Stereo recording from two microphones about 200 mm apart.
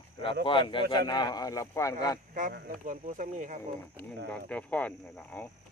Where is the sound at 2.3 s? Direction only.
45° right (ahead or behind).